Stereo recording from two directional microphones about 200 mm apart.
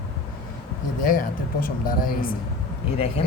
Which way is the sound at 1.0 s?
45° left (ahead or behind).